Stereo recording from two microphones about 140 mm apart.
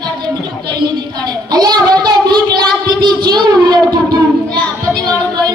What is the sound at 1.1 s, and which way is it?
Child singing, 30° right (ahead or behind).